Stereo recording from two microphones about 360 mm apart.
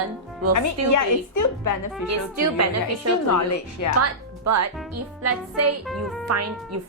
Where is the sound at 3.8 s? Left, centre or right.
Left.